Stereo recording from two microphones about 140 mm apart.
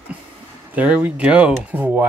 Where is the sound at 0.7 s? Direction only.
10° right (ahead or behind).